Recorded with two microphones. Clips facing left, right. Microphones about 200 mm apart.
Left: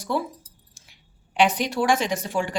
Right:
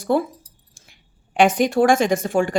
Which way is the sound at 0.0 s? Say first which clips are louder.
Right 7 dB; 50° right (ahead or behind).